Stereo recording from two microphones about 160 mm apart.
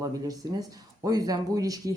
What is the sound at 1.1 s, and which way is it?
Speech, 25° right (ahead or behind).